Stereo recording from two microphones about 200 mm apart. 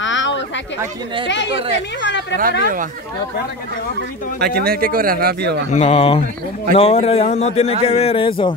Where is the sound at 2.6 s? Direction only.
40° right (ahead or behind).